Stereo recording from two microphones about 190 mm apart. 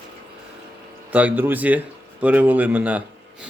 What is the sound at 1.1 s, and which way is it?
Speech, 10° right (ahead or behind).